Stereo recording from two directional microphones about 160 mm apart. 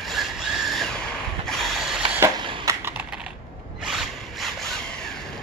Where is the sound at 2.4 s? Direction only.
30° right (ahead or behind).